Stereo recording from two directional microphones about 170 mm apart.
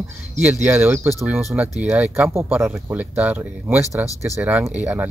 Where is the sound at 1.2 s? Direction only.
Centre (ahead or behind).